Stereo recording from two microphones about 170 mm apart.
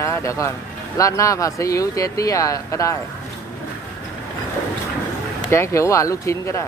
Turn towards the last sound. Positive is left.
turn(degrees=15)  # may be behind; listen again after turning